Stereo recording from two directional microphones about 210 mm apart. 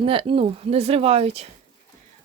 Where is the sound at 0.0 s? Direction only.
25° right (ahead or behind).